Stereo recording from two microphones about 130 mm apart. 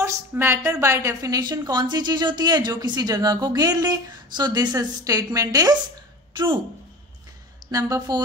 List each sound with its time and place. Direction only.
0.0 s a woman's voice: 20° right (ahead or behind); by 6.6 s 40° right (ahead or behind)
7.6 s a woman's voice: 30° right (ahead or behind)